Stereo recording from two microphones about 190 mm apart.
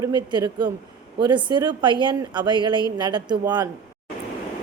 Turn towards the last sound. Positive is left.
turn(degrees=-20)  # may be behind; listen again after turning